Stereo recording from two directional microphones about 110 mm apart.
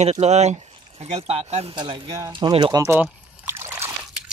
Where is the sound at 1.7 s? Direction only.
50° right (ahead or behind).